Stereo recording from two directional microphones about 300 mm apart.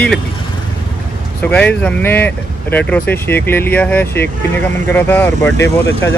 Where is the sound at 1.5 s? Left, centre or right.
Centre.